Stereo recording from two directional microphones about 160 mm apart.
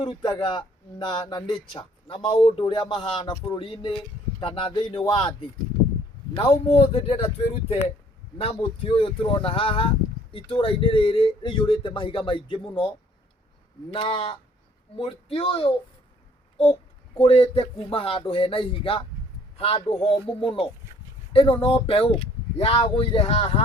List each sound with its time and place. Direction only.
0.0 s speech: 30° left (ahead or behind)
6.3 s speech: 35° left (ahead or behind)
13.9 s speech: 35° left (ahead or behind)
17.2 s speech: 40° left (ahead or behind)